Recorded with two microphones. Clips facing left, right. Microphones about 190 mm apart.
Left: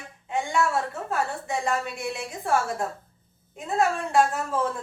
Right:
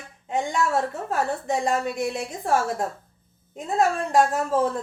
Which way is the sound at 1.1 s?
40° right (ahead or behind).